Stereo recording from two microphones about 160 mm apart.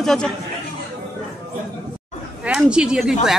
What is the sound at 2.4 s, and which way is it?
Speech, 5° right (ahead or behind).